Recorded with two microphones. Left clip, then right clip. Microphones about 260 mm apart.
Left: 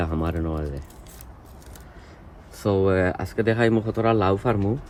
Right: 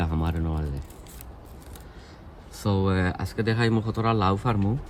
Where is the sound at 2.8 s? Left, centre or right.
Centre.